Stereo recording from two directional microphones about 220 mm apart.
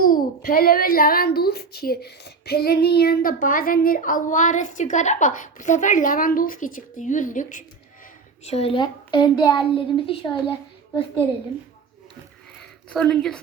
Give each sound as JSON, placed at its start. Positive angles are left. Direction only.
{"t": 0.4, "sound": "a woman's voice", "side_deg": 40}
{"t": 12.9, "sound": "speech", "side_deg": 5}